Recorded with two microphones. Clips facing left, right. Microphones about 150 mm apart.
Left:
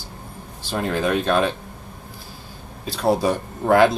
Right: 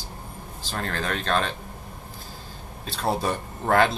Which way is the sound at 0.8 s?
15° left (ahead or behind).